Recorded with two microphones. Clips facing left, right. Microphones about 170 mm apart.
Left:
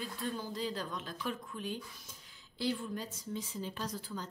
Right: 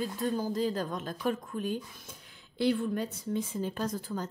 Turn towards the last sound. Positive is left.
turn(degrees=-50)  # may be behind; listen again after turning